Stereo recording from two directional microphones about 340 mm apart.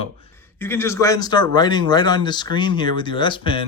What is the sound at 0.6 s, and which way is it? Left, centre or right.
Speech, centre.